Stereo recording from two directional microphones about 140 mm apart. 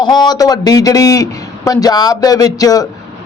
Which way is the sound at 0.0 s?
30° left (ahead or behind).